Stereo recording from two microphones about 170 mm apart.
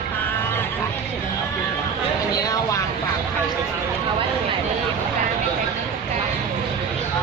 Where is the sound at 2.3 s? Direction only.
20° left (ahead or behind).